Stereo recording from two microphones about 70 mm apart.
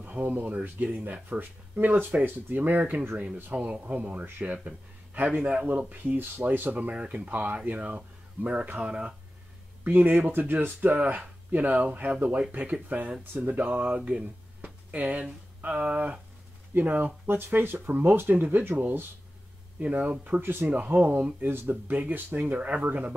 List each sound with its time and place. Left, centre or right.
0.0 s a man's voice: right
19.8 s a man's voice: right
21.4 s a man's voice: right